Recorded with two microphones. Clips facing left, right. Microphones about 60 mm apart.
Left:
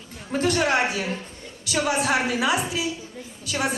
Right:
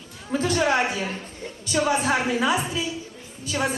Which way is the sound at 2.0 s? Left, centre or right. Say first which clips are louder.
Even; left.